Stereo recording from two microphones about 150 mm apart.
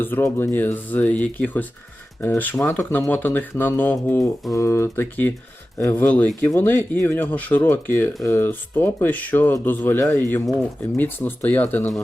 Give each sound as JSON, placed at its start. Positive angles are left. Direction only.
{"t": 0.0, "sound": "speech", "side_deg": 15}